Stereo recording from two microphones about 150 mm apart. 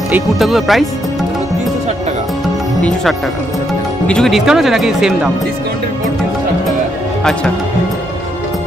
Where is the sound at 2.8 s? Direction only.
5° left (ahead or behind).